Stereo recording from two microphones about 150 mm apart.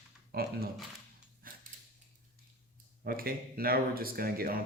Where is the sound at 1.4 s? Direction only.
70° right (ahead or behind).